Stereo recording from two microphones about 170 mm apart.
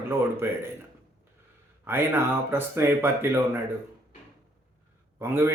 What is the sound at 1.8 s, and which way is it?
A man's voice, 15° right (ahead or behind).